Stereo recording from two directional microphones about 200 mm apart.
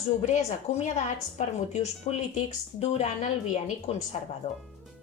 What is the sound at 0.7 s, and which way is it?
A woman's voice, 35° left (ahead or behind).